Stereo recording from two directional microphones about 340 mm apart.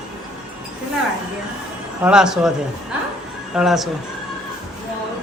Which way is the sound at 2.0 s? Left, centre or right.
Centre.